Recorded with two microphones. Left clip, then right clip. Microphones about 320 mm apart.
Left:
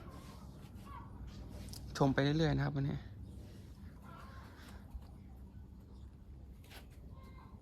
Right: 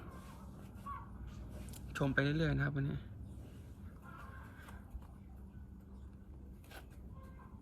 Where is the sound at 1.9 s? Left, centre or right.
Centre.